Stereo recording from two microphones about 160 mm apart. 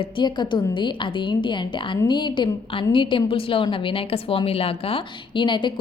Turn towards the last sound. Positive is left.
turn(degrees=30)  # may be behind; listen again after turning